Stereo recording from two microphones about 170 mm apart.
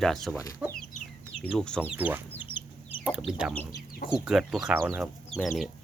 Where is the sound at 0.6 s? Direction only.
10° right (ahead or behind).